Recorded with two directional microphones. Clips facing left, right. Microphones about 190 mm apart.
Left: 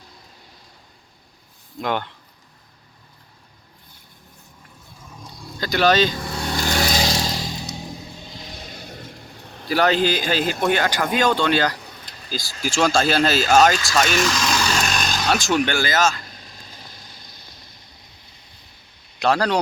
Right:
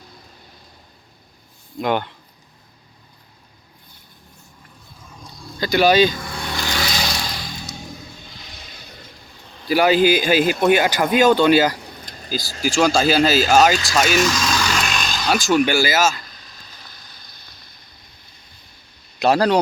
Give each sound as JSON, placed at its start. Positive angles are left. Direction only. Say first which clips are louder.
{"t": 1.8, "sound": "speech", "louder": "right 4 dB", "side_deg": -10}
{"t": 5.5, "sound": "speech", "louder": "right 3 dB", "side_deg": -5}
{"t": 6.1, "sound": "vehicle", "louder": "left 2 dB", "side_deg": 35}
{"t": 7.0, "sound": "a sound", "louder": "left 4 dB", "side_deg": 35}
{"t": 8.2, "sound": "vehicle", "louder": "left 5 dB", "side_deg": 35}
{"t": 9.6, "sound": "speech", "louder": "right 4 dB", "side_deg": -10}
{"t": 12.0, "sound": "vehicle", "louder": "right 4 dB", "side_deg": -40}
{"t": 12.6, "sound": "speech", "louder": "right 2 dB", "side_deg": 0}
{"t": 14.8, "sound": "vehicle", "louder": "left 1 dB", "side_deg": 40}
{"t": 15.3, "sound": "speech", "louder": "right 4 dB", "side_deg": 0}
{"t": 16.3, "sound": "vehicle", "louder": "left 3 dB", "side_deg": 45}
{"t": 16.7, "sound": "vehicle", "louder": "left 3 dB", "side_deg": 25}
{"t": 19.2, "sound": "speech", "louder": "right 3 dB", "side_deg": -10}